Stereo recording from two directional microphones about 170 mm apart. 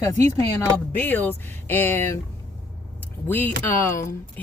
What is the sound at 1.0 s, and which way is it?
Speech, 10° left (ahead or behind).